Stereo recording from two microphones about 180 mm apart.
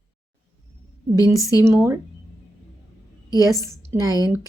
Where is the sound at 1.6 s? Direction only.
15° right (ahead or behind).